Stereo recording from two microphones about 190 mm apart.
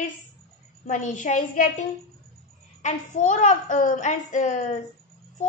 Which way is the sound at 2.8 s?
40° left (ahead or behind).